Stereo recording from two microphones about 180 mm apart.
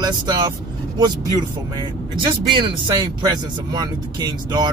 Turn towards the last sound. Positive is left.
turn(degrees=-25)  # may be behind; listen again after turning